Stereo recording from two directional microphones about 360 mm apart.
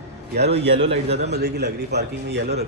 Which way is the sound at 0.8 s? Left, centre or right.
Centre.